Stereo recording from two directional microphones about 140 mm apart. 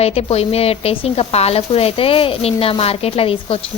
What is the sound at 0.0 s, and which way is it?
A woman's voice, 45° left (ahead or behind).